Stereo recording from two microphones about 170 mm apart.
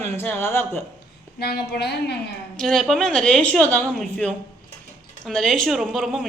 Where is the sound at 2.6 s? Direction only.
Centre (ahead or behind).